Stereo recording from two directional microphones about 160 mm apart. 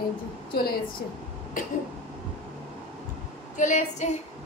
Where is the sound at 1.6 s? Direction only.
60° left (ahead or behind).